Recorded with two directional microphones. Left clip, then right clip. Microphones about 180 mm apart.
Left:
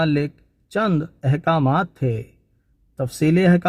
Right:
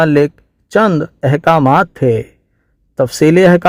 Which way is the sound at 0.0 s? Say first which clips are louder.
Right 11 dB; 45° right (ahead or behind).